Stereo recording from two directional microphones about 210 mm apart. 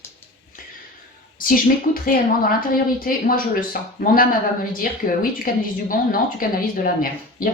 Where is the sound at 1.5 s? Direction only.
45° left (ahead or behind).